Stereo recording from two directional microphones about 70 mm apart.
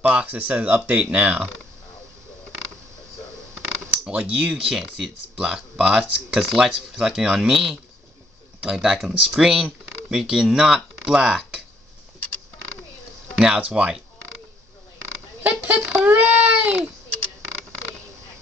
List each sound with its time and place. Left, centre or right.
0.0 s speech: centre
4.0 s speech: centre
13.4 s speech: centre
15.4 s speech: right